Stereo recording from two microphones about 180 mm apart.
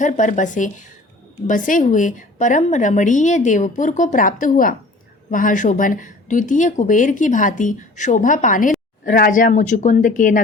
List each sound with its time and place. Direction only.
0.0 s speech: 45° left (ahead or behind)